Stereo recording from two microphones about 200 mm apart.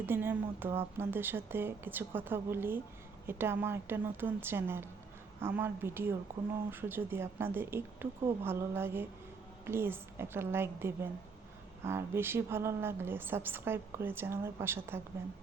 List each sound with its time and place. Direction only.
0.0 s a woman's voice: 10° right (ahead or behind)